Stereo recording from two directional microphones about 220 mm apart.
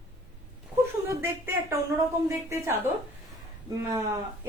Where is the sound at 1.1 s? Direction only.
10° right (ahead or behind).